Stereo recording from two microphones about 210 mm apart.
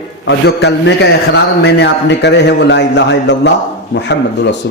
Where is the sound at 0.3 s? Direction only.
55° left (ahead or behind).